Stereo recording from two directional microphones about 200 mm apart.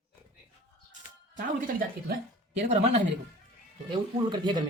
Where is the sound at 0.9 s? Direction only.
40° right (ahead or behind).